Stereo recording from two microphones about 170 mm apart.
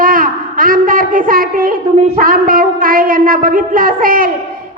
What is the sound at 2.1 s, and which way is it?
A woman's voice, 55° right (ahead or behind).